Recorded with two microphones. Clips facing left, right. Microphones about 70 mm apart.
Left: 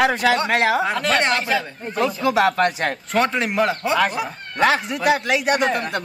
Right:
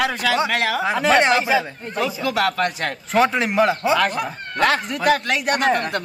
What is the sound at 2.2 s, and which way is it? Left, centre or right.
Speech, left.